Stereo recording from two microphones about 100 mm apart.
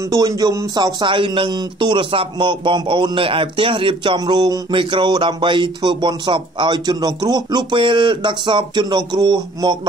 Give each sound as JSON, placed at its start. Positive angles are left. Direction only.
{"t": 0.1, "sound": "speech", "side_deg": -40}